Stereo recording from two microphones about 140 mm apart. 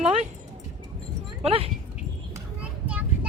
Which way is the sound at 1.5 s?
45° right (ahead or behind).